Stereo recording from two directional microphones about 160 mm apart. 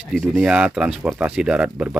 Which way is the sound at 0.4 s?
5° right (ahead or behind).